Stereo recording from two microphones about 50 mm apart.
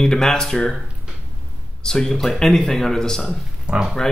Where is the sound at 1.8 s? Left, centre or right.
Centre.